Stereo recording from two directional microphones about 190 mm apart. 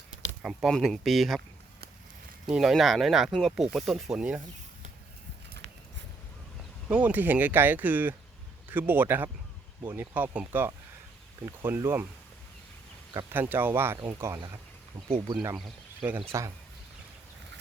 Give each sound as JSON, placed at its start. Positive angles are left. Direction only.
{"t": 0.4, "sound": "speech", "side_deg": 0}
{"t": 2.5, "sound": "speech", "side_deg": 0}
{"t": 6.8, "sound": "speech", "side_deg": -10}
{"t": 13.1, "sound": "speech", "side_deg": -10}
{"t": 15.5, "sound": "speech", "side_deg": -10}